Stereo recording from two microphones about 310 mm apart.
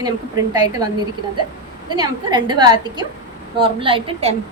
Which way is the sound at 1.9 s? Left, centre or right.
Centre.